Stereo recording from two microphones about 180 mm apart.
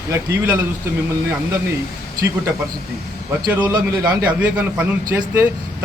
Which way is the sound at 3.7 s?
20° right (ahead or behind).